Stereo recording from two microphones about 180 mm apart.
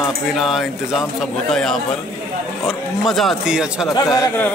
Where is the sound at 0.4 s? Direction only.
Centre (ahead or behind).